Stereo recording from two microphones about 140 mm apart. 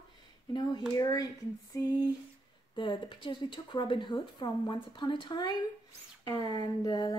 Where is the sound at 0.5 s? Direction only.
30° left (ahead or behind).